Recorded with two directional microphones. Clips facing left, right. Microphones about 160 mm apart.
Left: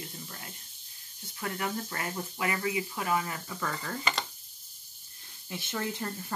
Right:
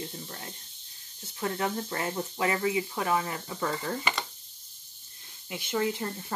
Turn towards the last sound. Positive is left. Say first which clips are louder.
# right 4 dB
turn(degrees=-20)  # may be behind; listen again after turning